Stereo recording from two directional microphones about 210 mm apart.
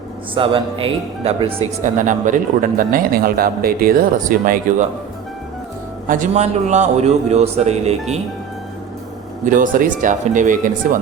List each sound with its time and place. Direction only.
0.3 s speech: 25° right (ahead or behind)
1.8 s speech: 35° right (ahead or behind)
6.1 s speech: 35° right (ahead or behind)
9.5 s speech: 40° right (ahead or behind)